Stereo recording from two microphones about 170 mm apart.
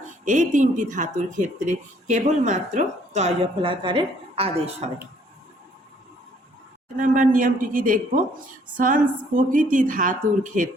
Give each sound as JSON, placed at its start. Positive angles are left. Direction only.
{"t": 0.3, "sound": "speech", "side_deg": -45}
{"t": 6.9, "sound": "speech", "side_deg": -50}